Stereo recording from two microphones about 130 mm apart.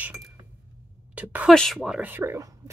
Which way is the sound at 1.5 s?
Centre (ahead or behind).